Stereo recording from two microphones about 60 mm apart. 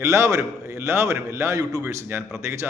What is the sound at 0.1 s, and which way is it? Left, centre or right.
Speech, right.